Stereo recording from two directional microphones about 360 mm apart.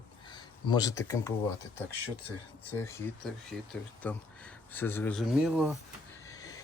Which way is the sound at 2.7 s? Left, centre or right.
Centre.